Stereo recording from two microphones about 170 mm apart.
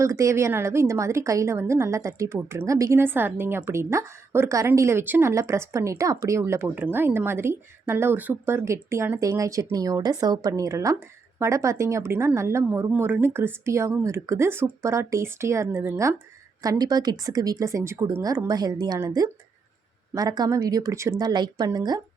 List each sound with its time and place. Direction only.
0.0 s a woman's voice: 20° right (ahead or behind)